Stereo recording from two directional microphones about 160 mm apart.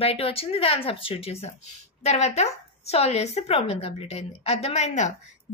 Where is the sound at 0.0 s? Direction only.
40° left (ahead or behind).